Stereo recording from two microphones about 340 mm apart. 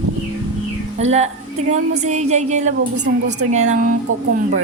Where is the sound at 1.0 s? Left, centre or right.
Centre; by 3.4 s right.